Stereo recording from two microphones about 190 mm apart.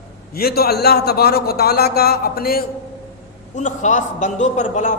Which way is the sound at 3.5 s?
40° left (ahead or behind).